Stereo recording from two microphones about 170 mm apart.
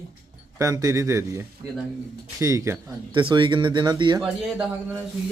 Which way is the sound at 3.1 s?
30° right (ahead or behind).